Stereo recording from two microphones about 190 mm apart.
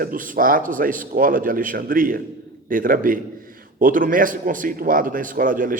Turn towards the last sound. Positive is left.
turn(degrees=-45)  # may be behind; listen again after turning